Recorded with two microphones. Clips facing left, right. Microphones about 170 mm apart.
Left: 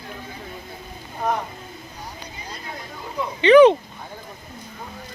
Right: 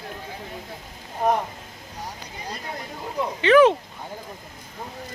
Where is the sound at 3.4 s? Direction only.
Centre (ahead or behind).